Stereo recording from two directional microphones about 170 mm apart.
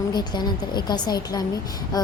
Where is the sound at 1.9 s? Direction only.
25° left (ahead or behind).